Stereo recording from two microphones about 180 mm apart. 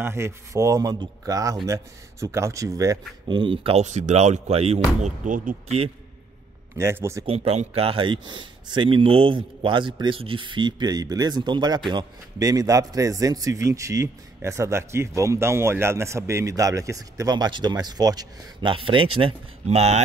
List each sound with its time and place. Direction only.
0.0 s a man's voice: 15° right (ahead or behind); by 5.8 s 50° right (ahead or behind)
6.8 s speech: 15° right (ahead or behind)
7.2 s a man's voice: 35° right (ahead or behind)